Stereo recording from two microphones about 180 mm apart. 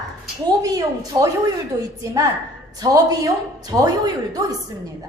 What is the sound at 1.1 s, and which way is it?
Speech, 20° right (ahead or behind).